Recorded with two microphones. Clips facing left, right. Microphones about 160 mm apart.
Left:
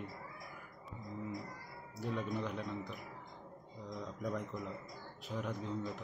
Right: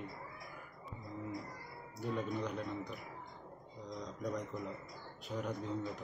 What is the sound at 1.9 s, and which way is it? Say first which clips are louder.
Speech: even; centre (ahead or behind).